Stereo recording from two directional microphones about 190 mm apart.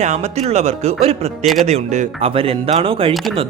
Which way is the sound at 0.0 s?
35° right (ahead or behind).